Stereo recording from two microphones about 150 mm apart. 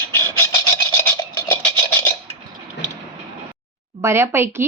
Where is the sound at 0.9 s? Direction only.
15° left (ahead or behind).